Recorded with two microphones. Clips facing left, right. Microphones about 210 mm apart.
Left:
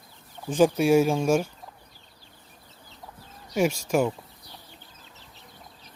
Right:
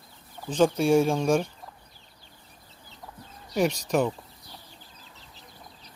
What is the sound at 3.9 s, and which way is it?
Speech, 5° left (ahead or behind).